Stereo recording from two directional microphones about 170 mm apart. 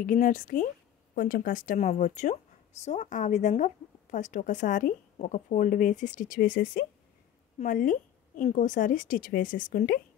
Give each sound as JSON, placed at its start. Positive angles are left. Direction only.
{"t": 0.0, "sound": "speech", "side_deg": 55}